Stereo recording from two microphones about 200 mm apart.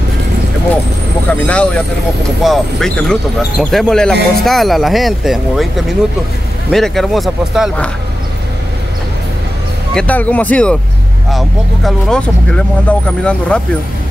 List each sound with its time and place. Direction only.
2.4 s speech: centre (ahead or behind)
9.9 s speech: 5° left (ahead or behind)